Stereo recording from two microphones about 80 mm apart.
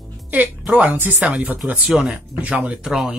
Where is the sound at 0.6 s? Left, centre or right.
Centre.